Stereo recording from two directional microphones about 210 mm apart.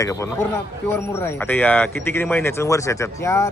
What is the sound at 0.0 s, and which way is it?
Speech, 15° left (ahead or behind).